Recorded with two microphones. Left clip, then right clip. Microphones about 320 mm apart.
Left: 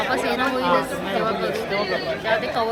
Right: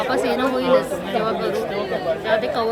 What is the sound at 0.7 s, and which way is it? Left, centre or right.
Speech, centre.